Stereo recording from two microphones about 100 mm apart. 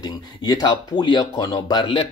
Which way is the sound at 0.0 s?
45° left (ahead or behind).